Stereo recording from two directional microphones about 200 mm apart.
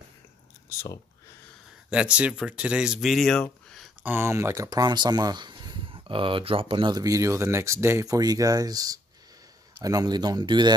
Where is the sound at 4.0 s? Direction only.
10° right (ahead or behind).